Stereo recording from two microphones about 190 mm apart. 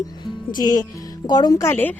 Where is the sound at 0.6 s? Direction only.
20° left (ahead or behind).